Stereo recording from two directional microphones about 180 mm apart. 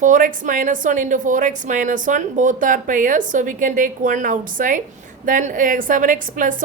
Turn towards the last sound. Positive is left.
turn(degrees=-45)  # may be behind; listen again after turning